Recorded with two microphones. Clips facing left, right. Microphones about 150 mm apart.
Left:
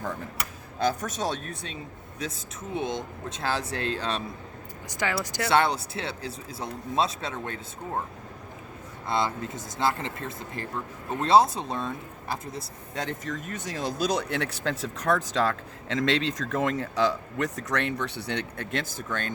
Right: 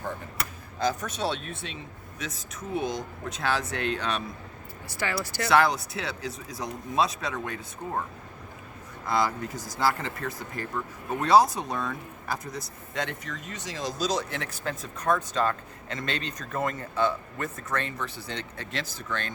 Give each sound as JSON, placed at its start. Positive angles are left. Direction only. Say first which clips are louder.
{"t": 1.1, "sound": "speech", "louder": "even", "side_deg": 40}
{"t": 4.9, "sound": "speech", "louder": "left 2 dB", "side_deg": 15}
{"t": 9.0, "sound": "speech", "louder": "right 1 dB", "side_deg": 25}
{"t": 13.1, "sound": "speech", "louder": "left 4 dB", "side_deg": 45}